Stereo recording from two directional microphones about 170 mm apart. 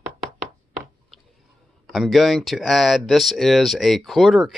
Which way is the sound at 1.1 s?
Centre (ahead or behind).